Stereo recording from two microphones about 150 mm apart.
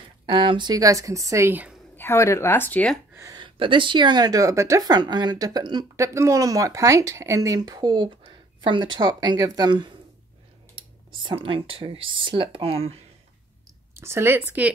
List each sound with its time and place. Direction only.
0.3 s speech: 35° right (ahead or behind); by 1.8 s 10° right (ahead or behind)
2.0 s speech: 15° left (ahead or behind)
3.2 s speech: 25° right (ahead or behind)
11.2 s speech: 35° right (ahead or behind)
13.9 s speech: 15° right (ahead or behind)